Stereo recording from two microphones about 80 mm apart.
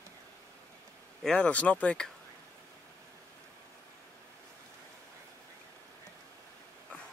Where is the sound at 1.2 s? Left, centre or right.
Centre.